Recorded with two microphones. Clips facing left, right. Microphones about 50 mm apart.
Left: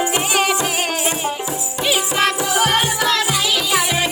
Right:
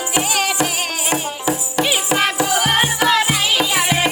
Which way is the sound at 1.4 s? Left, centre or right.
Right.